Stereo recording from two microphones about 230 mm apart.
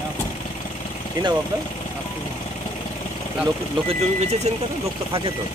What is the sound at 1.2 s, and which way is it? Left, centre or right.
Speech, centre.